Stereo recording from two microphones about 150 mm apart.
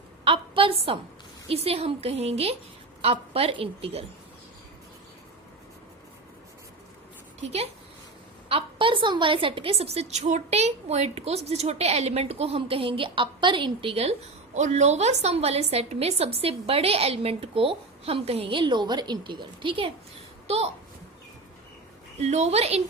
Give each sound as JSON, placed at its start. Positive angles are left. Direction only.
{"t": 0.3, "sound": "a woman's voice", "side_deg": -35}
{"t": 7.4, "sound": "a woman's voice", "side_deg": -45}
{"t": 22.2, "sound": "a woman's voice", "side_deg": -45}